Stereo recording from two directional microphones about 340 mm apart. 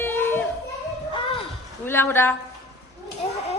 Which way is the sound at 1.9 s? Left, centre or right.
Centre.